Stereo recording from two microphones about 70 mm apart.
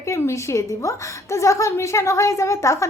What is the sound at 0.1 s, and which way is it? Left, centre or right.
A woman's voice, left.